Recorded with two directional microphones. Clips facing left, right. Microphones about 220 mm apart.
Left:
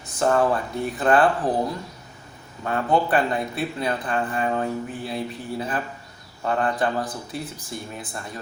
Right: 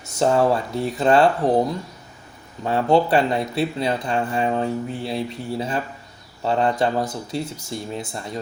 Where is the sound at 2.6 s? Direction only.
30° right (ahead or behind).